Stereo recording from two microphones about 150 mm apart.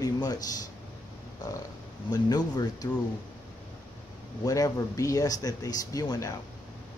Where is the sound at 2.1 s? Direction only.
25° left (ahead or behind).